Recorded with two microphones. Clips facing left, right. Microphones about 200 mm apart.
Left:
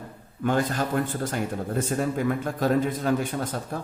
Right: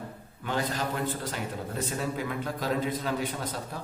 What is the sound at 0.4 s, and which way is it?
A man's voice, 50° left (ahead or behind).